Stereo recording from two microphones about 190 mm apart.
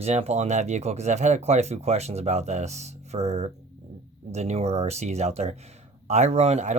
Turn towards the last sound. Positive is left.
turn(degrees=-35)  # may be behind; listen again after turning